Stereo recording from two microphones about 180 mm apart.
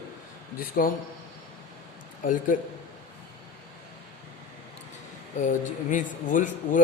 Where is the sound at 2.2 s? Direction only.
50° left (ahead or behind).